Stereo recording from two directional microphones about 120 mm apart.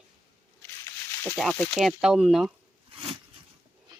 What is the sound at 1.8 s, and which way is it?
Speech, 5° right (ahead or behind).